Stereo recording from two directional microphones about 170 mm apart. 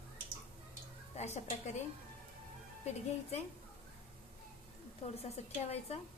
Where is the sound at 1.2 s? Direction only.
40° left (ahead or behind).